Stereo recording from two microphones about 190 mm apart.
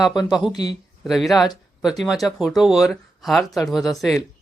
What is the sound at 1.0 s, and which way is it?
Speech, centre (ahead or behind).